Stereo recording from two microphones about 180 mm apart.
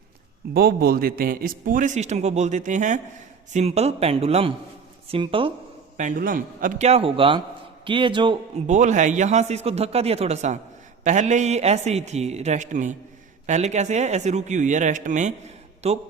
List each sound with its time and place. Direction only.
0.5 s a man's voice: 60° right (ahead or behind); by 5.5 s 30° right (ahead or behind)
6.0 s a man's voice: 45° right (ahead or behind); by 8.4 s 25° right (ahead or behind)
8.6 s a man's voice: 40° right (ahead or behind)